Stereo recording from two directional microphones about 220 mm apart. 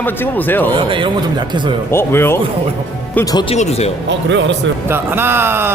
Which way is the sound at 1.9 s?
10° left (ahead or behind).